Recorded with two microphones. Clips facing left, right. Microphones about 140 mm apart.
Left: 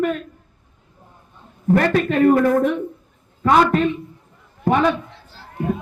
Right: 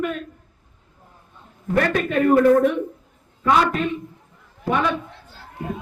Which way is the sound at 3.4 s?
45° left (ahead or behind).